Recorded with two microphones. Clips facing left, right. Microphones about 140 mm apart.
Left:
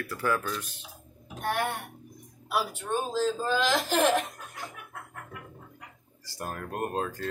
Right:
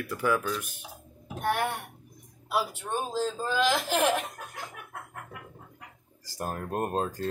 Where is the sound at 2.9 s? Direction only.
15° right (ahead or behind).